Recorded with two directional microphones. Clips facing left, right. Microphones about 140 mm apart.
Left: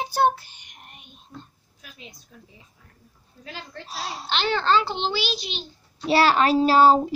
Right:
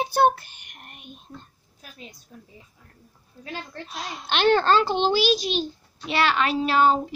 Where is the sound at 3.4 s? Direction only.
55° right (ahead or behind).